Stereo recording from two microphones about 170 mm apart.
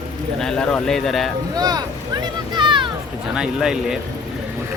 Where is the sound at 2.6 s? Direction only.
30° right (ahead or behind).